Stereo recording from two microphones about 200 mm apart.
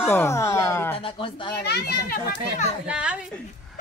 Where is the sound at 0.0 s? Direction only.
10° left (ahead or behind).